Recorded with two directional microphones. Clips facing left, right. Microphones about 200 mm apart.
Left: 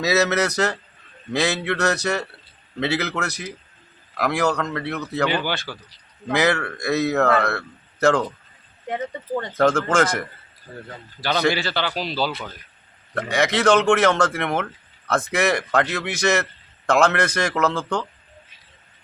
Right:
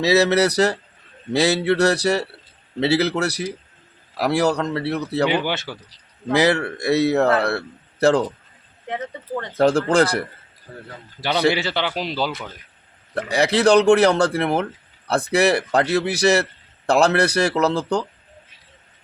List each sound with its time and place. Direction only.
0.0 s speech: 30° right (ahead or behind)
5.5 s speech: 20° right (ahead or behind)
6.3 s speech: 30° right (ahead or behind)
8.9 s speech: centre (ahead or behind)
9.6 s speech: 35° right (ahead or behind)
11.2 s a man's voice: 15° right (ahead or behind)
13.1 s speech: 35° right (ahead or behind)